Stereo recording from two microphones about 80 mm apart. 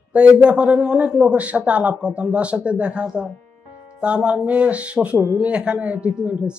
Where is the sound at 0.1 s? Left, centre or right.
Centre.